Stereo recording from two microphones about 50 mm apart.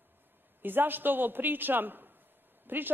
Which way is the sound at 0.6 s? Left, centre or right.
Right.